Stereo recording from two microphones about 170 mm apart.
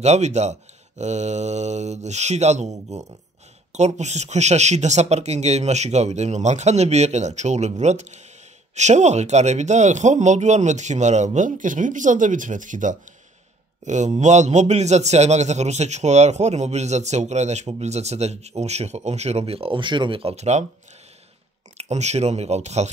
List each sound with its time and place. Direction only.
0.0 s a man's voice: 40° right (ahead or behind)
21.7 s a man's voice: 40° right (ahead or behind)